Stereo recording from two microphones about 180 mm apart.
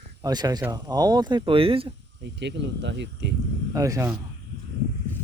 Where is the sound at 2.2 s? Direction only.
75° right (ahead or behind).